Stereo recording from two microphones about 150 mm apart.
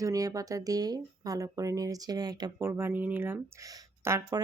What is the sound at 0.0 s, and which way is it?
Speech, 25° right (ahead or behind).